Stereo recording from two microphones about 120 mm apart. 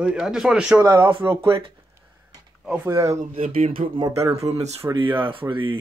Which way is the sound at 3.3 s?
55° right (ahead or behind).